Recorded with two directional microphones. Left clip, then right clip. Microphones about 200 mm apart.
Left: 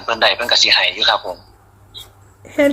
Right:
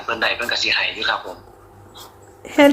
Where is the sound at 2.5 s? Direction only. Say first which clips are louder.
Right 2 dB; 20° right (ahead or behind).